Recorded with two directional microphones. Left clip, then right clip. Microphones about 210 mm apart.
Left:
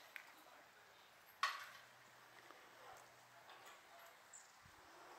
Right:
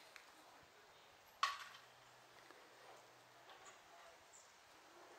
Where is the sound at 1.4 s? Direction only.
30° right (ahead or behind).